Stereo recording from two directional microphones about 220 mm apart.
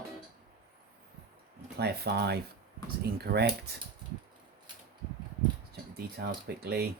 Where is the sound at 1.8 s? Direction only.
50° right (ahead or behind).